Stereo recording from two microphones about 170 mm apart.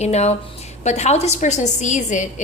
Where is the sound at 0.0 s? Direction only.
40° left (ahead or behind).